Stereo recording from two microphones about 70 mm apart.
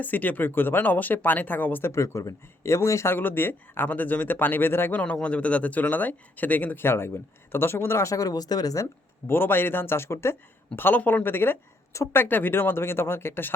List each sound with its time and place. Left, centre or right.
0.0 s speech: left
1.9 s speech: left
3.2 s speech: left
4.9 s speech: centre
6.8 s speech: left
9.2 s speech: left